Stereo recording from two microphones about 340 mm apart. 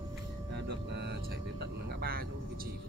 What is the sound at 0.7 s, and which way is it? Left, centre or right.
Vehicle, right.